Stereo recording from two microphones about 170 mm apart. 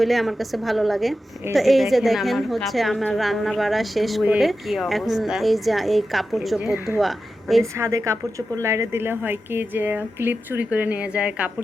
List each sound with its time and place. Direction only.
0.0 s a woman's voice: centre (ahead or behind)
7.6 s a woman's voice: 15° right (ahead or behind)